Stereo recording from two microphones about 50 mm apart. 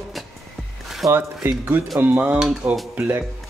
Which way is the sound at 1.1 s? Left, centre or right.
Right.